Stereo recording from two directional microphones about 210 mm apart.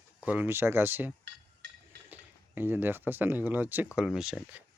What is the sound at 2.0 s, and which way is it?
Speech, 10° right (ahead or behind).